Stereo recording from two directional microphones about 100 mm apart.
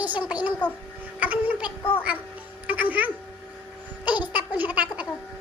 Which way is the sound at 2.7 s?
15° right (ahead or behind).